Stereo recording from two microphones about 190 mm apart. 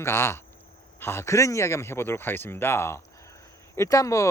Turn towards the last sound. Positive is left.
turn(degrees=15)  # may be behind; listen again after turning